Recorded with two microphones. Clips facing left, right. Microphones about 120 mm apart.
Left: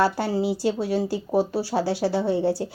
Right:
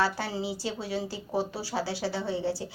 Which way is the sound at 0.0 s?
50° left (ahead or behind).